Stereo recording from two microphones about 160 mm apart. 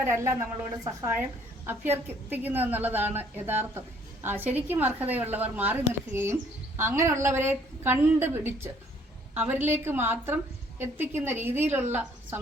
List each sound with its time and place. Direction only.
0.0 s a woman's voice: 15° right (ahead or behind)